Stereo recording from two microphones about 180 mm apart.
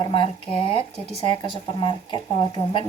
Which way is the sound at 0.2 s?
30° left (ahead or behind).